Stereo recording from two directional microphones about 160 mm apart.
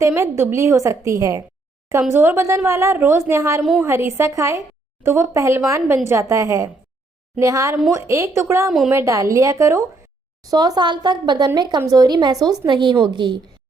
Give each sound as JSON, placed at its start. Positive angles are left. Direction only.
{"t": 0.0, "sound": "a woman's voice", "side_deg": -15}
{"t": 3.6, "sound": "a woman's voice", "side_deg": 0}
{"t": 3.8, "sound": "a woman's voice", "side_deg": -15}